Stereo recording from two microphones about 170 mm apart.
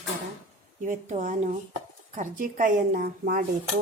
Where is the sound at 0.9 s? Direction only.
50° right (ahead or behind).